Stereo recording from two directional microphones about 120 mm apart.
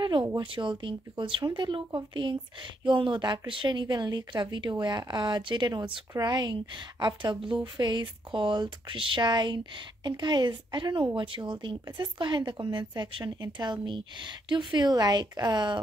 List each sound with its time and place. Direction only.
0.0 s speech: 40° right (ahead or behind)